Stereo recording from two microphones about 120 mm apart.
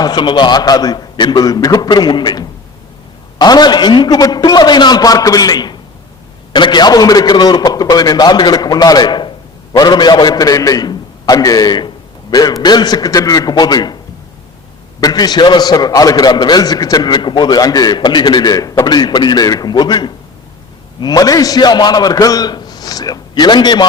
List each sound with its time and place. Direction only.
0.0 s a man's voice: 35° left (ahead or behind)
15.0 s a man's voice: 35° left (ahead or behind)